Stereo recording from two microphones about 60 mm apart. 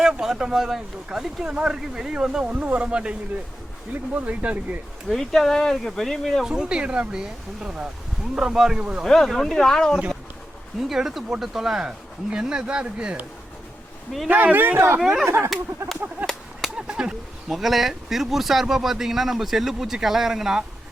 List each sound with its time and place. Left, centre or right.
0.0 s speech: centre
2.4 s speech: right
5.0 s speech: centre
6.4 s speech: centre
9.2 s speech: centre
10.8 s speech: centre
14.3 s a man's voice: right
15.0 s speech: centre
16.2 s a sound: centre
16.7 s a sound: centre
17.5 s speech: centre